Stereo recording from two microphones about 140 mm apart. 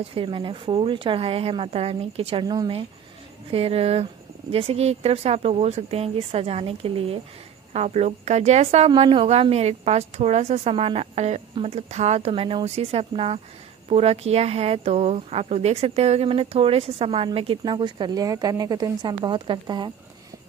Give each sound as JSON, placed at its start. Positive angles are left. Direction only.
{"t": 0.0, "sound": "speech", "side_deg": -40}
{"t": 2.4, "sound": "speech", "side_deg": -30}
{"t": 3.5, "sound": "speech", "side_deg": -45}
{"t": 7.7, "sound": "speech", "side_deg": -55}